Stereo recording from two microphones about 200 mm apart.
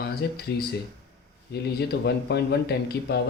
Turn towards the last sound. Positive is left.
turn(degrees=55)  # may be behind; listen again after turning